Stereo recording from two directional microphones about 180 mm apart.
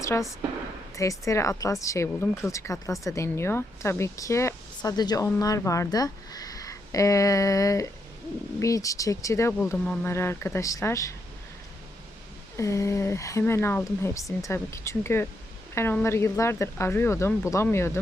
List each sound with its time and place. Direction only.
0.0 s speech: 15° left (ahead or behind)
12.5 s speech: 15° left (ahead or behind)